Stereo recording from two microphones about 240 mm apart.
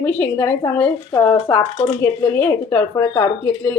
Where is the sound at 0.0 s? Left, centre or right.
Centre.